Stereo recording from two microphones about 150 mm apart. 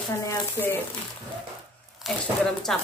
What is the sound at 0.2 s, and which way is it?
Speech, 15° left (ahead or behind).